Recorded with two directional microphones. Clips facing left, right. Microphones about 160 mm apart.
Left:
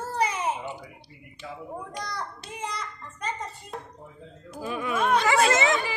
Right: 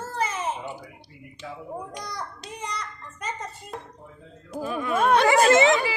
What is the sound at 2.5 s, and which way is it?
Child singing, 5° left (ahead or behind).